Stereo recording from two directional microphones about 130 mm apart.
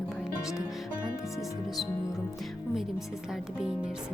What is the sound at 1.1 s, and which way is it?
Speech, 25° left (ahead or behind).